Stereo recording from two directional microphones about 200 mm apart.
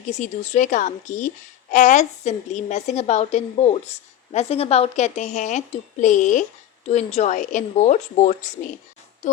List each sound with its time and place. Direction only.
0.1 s speech: 40° left (ahead or behind)
9.2 s music: 40° left (ahead or behind)